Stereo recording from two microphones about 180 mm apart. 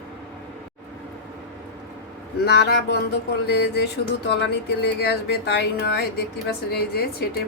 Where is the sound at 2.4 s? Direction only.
70° left (ahead or behind).